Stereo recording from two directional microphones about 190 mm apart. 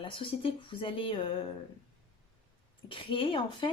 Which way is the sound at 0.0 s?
25° left (ahead or behind).